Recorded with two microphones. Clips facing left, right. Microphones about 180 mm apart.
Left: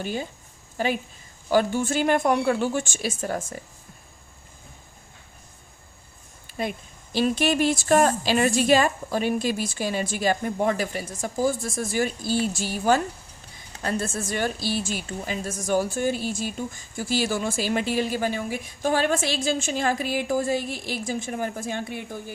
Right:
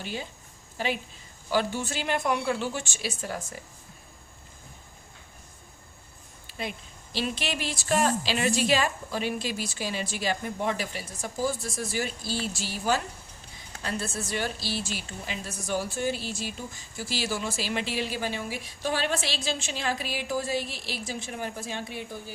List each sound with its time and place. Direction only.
0.0 s a woman's voice: 50° left (ahead or behind)
1.5 s a woman's voice: 50° left (ahead or behind)
6.5 s a woman's voice: 50° left (ahead or behind)